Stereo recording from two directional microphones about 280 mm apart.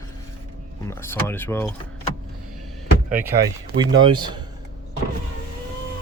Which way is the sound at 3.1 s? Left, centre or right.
Centre.